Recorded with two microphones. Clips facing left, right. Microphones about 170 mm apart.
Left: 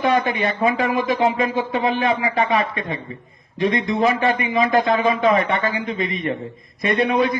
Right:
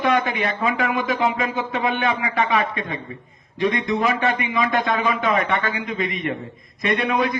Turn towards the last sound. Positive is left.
turn(degrees=30)  # may be behind; listen again after turning